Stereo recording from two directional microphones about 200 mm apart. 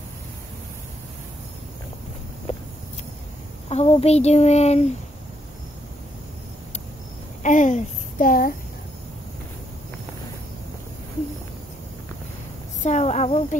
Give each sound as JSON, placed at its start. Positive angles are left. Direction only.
{"t": 2.5, "sound": "a sound", "side_deg": 30}
{"t": 3.6, "sound": "child singing", "side_deg": 30}
{"t": 7.4, "sound": "speech", "side_deg": 40}
{"t": 12.8, "sound": "child singing", "side_deg": 35}